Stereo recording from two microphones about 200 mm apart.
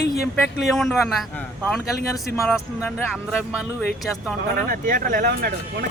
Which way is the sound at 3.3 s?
5° right (ahead or behind).